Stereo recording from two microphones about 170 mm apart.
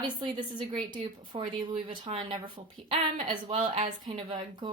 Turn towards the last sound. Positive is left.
turn(degrees=-30)  # may be behind; listen again after turning